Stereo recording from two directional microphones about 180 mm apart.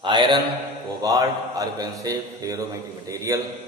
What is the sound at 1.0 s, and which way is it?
A man's voice, 20° right (ahead or behind).